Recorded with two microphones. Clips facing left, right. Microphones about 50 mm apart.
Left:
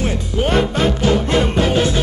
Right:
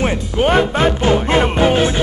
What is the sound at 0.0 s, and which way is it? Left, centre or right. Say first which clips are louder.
Music: right 3 dB; right.